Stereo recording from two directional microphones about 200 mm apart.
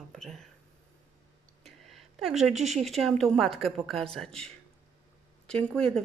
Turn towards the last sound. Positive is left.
turn(degrees=5)  # may be behind; listen again after turning